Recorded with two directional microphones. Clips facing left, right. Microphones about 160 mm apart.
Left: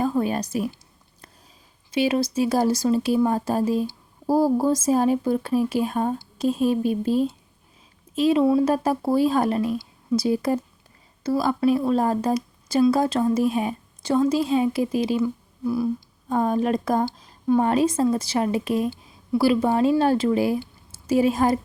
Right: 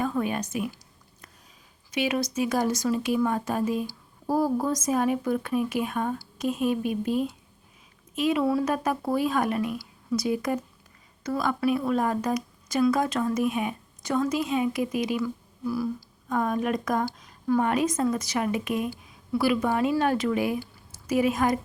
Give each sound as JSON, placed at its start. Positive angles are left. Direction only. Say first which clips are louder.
{"t": 0.0, "sound": "speech", "louder": "left 4 dB", "side_deg": 35}
{"t": 1.9, "sound": "a woman's voice", "louder": "left 5 dB", "side_deg": 30}